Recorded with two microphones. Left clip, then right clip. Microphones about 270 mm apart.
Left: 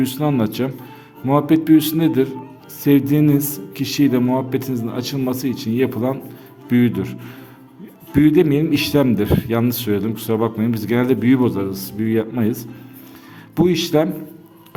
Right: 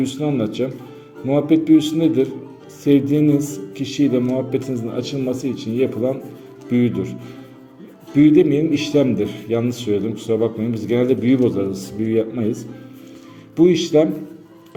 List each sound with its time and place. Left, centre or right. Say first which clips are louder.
0.0 s a man's voice: left 1 dB; left
8.2 s a man's voice: right 1 dB; left